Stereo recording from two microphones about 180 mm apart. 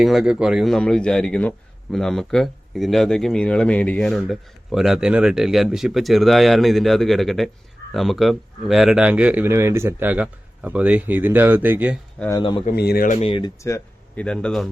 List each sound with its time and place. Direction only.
0.0 s a man's voice: centre (ahead or behind)
12.3 s speech: 25° left (ahead or behind)
12.7 s speech: 60° left (ahead or behind)
13.1 s speech: 30° left (ahead or behind)
13.6 s speech: 15° left (ahead or behind)
14.3 s a man's voice: 5° left (ahead or behind)